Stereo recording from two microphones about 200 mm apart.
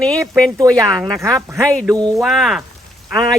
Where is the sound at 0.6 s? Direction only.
15° right (ahead or behind).